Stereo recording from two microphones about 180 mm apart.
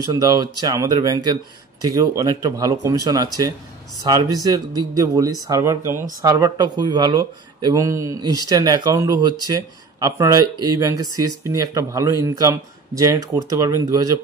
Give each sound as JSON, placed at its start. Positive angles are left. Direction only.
{"t": 0.0, "sound": "speech", "side_deg": -20}